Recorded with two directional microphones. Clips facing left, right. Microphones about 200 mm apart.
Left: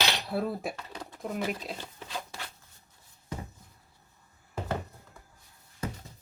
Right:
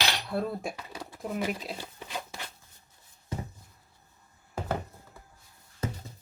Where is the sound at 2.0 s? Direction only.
15° right (ahead or behind).